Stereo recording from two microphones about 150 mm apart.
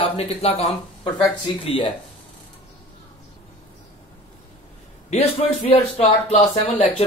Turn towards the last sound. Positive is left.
turn(degrees=50)  # may be behind; listen again after turning